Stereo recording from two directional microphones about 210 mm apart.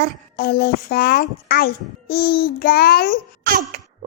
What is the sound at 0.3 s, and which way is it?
A child's voice, 45° left (ahead or behind).